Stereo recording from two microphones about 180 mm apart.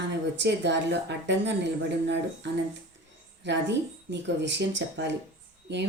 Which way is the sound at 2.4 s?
75° right (ahead or behind).